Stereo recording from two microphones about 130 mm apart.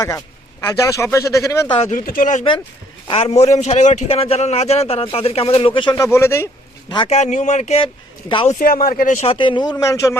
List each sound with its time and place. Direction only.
0.7 s speech: 25° left (ahead or behind)
1.6 s speech: 40° left (ahead or behind)
1.9 s speech: 90° left
3.2 s a man's voice: 55° left (ahead or behind)
4.1 s speech: 50° left (ahead or behind)
6.0 s speech: 20° left (ahead or behind)
6.8 s speech: 40° left (ahead or behind)
7.1 s a man's voice: 65° left (ahead or behind)
8.4 s speech: 90° left
9.2 s speech: 45° left (ahead or behind); by 10.2 s 25° left (ahead or behind)